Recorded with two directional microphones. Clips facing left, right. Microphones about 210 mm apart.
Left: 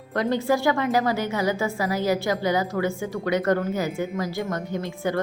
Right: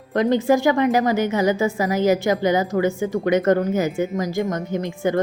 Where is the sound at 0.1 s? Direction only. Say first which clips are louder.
Right 5 dB; 20° right (ahead or behind).